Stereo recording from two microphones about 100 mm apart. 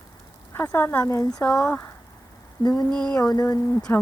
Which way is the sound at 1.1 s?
35° left (ahead or behind).